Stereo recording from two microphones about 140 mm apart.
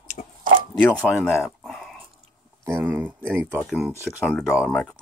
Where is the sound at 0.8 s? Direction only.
15° left (ahead or behind).